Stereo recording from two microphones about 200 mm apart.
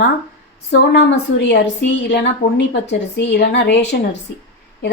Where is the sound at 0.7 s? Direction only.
60° left (ahead or behind).